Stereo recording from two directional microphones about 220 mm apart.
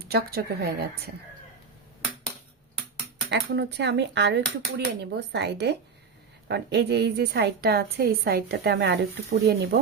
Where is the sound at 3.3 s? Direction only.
50° right (ahead or behind).